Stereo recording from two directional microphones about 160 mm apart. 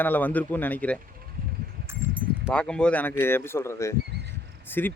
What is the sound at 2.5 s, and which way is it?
Speech, 5° left (ahead or behind).